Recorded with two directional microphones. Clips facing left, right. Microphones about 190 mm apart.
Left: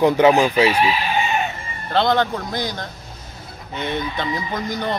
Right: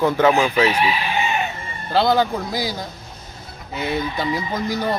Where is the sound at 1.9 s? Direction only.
5° right (ahead or behind).